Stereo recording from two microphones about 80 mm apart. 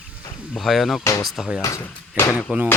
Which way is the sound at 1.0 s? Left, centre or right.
Left.